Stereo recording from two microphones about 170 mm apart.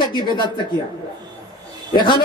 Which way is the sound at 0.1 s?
25° left (ahead or behind).